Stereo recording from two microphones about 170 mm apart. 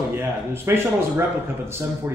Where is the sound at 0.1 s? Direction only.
15° right (ahead or behind).